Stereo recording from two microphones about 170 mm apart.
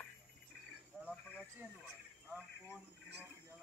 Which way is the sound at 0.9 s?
5° right (ahead or behind).